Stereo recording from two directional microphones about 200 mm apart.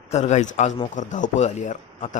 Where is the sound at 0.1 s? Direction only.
35° left (ahead or behind).